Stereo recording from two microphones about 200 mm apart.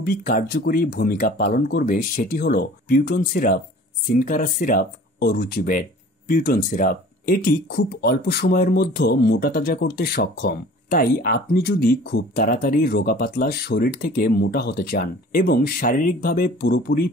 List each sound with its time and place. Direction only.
0.0 s speech: 45° left (ahead or behind)